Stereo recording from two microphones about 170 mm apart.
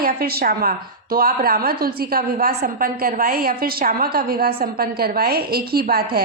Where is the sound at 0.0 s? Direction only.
65° right (ahead or behind).